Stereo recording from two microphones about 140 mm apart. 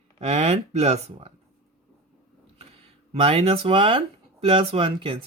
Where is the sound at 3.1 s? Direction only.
45° right (ahead or behind).